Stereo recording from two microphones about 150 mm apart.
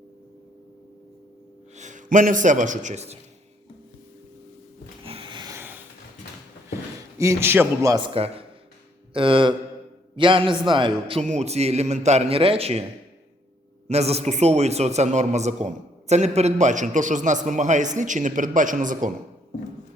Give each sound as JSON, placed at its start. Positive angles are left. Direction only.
{"t": 1.7, "sound": "a man's voice", "side_deg": -55}
{"t": 5.0, "sound": "a sound", "side_deg": -35}
{"t": 7.2, "sound": "a man's voice", "side_deg": -20}
{"t": 8.0, "sound": "a man's voice", "side_deg": -40}
{"t": 11.2, "sound": "a man's voice", "side_deg": -50}
{"t": 13.8, "sound": "a man's voice", "side_deg": -45}